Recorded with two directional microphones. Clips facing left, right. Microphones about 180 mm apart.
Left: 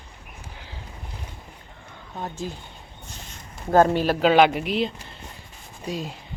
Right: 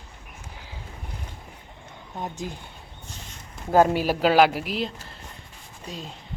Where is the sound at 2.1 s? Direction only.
15° right (ahead or behind).